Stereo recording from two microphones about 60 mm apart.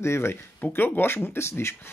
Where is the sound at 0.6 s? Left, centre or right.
Left.